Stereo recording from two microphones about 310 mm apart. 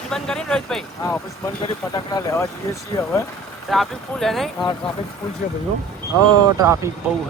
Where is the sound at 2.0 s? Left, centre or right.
Centre.